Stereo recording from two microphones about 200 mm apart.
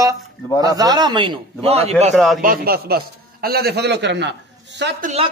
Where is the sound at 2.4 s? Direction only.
45° right (ahead or behind).